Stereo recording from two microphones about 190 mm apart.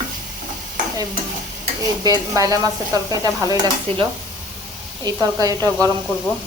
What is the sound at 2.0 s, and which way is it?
Stir, 20° right (ahead or behind).